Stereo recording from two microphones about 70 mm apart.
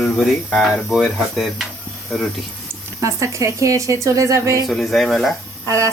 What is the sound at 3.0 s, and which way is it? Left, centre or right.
Speech, right.